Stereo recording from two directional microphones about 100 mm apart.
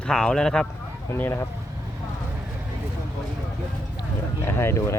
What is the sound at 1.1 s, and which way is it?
Speech, 20° left (ahead or behind).